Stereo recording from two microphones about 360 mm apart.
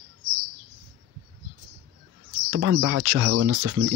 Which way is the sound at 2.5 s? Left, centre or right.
Right.